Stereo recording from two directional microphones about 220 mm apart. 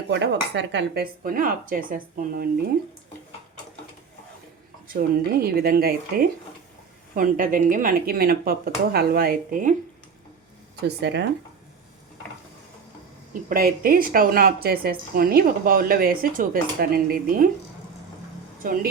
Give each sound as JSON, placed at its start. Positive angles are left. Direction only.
{"t": 0.1, "sound": "a woman's voice", "side_deg": -50}
{"t": 4.9, "sound": "a woman's voice", "side_deg": -45}
{"t": 10.8, "sound": "speech", "side_deg": -50}
{"t": 13.5, "sound": "a woman's voice", "side_deg": -40}